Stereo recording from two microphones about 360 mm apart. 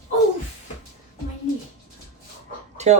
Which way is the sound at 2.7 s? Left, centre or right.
Centre.